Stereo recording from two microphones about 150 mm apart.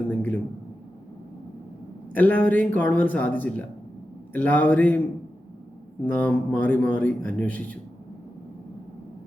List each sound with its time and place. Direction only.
0.1 s a sound: 10° left (ahead or behind)
2.1 s a man's voice: 10° left (ahead or behind)
6.1 s a man's voice: 10° left (ahead or behind)